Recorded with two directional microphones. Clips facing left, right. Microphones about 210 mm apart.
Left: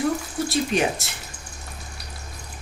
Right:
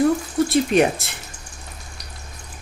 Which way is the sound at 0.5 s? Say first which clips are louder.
Right 5 dB; 55° right (ahead or behind).